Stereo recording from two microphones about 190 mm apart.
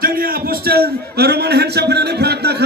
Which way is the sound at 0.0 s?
50° right (ahead or behind).